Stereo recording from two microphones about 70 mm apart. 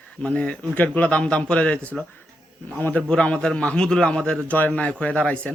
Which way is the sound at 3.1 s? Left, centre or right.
Centre.